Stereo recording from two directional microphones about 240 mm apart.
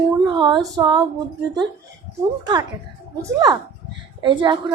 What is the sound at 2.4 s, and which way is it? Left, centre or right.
Speech, centre.